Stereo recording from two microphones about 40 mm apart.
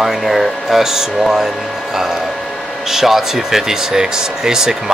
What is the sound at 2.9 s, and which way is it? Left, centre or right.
Speech, centre.